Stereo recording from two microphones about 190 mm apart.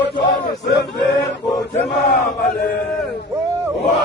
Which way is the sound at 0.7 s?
60° left (ahead or behind).